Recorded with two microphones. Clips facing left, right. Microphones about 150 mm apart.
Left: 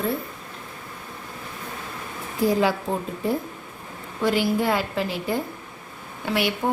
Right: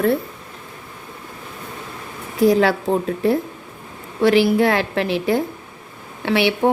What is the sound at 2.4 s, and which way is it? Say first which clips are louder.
Speech: right 6 dB; 80° right.